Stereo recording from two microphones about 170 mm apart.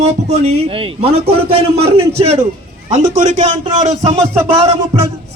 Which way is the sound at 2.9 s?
50° right (ahead or behind).